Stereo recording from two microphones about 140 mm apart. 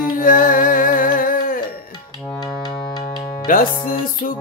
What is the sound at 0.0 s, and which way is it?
Music, 80° left.